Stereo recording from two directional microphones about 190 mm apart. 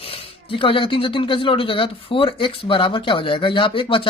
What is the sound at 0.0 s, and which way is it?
Speech, 30° left (ahead or behind).